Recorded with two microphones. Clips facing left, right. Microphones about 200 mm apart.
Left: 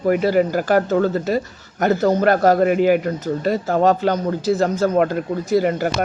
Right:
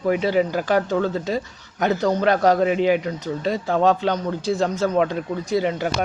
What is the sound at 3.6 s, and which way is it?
Speech, 40° left (ahead or behind).